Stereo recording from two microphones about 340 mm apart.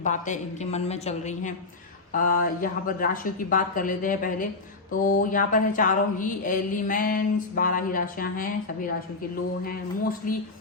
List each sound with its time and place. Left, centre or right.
0.0 s speech: left
9.6 s speech: left